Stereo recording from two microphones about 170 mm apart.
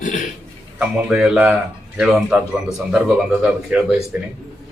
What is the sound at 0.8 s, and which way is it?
A man's voice, 5° right (ahead or behind).